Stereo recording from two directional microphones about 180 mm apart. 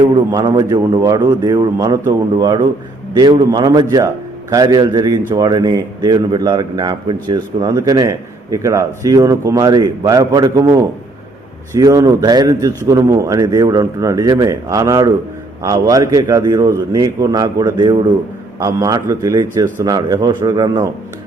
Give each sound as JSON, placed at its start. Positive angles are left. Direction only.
{"t": 0.0, "sound": "speech", "side_deg": -25}